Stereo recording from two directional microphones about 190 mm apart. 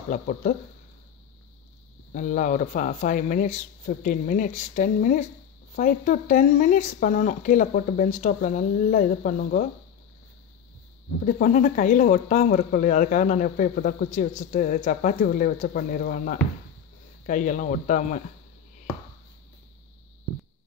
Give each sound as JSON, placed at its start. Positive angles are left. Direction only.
{"t": 0.1, "sound": "speech", "side_deg": 45}
{"t": 2.1, "sound": "speech", "side_deg": 40}
{"t": 11.2, "sound": "speech", "side_deg": 45}